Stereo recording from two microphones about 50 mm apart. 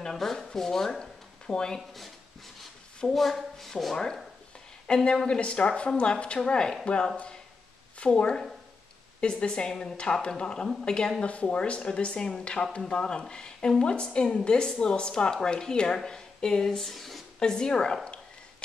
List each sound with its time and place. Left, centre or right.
0.0 s speech: centre
3.0 s a woman's voice: centre
17.4 s a woman's voice: centre